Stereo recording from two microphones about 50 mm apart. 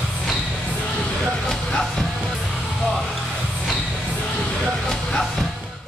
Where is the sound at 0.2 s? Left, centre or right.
Centre.